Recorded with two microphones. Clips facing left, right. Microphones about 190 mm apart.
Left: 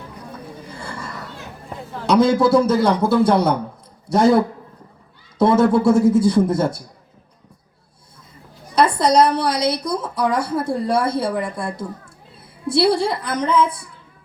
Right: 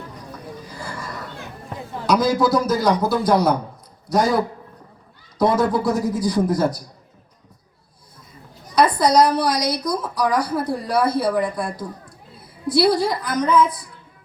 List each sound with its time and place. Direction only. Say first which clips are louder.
0.7 s a sound: left 1 dB; 25° left (ahead or behind)
2.0 s a woman's voice: left 3 dB; 25° left (ahead or behind)
8.7 s a woman's voice: even; 25° left (ahead or behind)